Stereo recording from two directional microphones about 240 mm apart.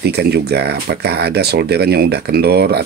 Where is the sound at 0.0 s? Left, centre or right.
Right.